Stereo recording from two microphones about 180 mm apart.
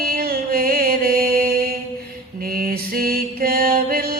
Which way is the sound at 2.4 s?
55° right (ahead or behind).